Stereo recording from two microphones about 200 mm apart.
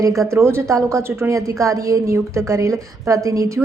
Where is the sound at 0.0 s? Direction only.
15° right (ahead or behind).